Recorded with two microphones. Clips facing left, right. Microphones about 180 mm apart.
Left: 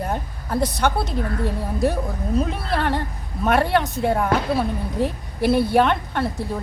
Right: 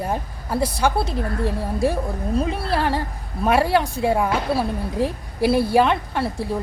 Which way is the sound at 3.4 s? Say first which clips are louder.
Right 1 dB; 5° right (ahead or behind).